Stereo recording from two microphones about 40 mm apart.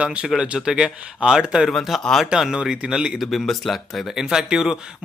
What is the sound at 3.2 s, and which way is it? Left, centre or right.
Speech, centre.